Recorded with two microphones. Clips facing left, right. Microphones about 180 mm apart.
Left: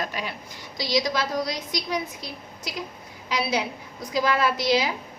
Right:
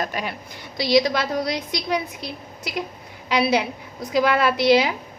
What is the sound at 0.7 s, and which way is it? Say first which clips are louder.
A woman's voice: right 6 dB; 60° right (ahead or behind).